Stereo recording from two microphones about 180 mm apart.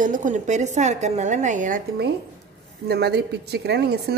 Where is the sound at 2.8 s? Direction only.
65° right (ahead or behind).